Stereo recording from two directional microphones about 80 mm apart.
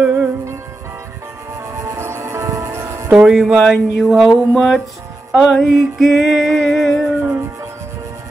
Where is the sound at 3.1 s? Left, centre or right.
Centre.